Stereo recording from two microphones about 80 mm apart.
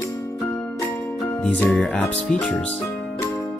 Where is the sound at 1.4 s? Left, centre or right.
Left.